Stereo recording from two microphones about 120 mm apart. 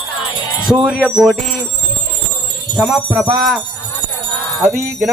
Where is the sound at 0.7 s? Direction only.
5° right (ahead or behind).